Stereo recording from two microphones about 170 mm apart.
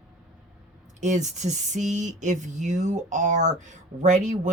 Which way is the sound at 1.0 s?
45° right (ahead or behind).